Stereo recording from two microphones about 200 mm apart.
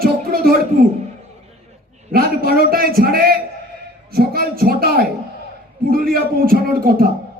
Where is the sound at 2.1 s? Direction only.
50° right (ahead or behind).